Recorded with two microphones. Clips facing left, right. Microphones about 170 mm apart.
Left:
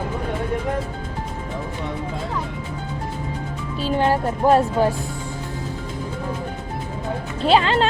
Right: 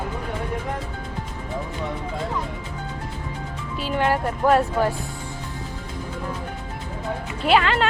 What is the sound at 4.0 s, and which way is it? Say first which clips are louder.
Music: left 2 dB; 30° left (ahead or behind).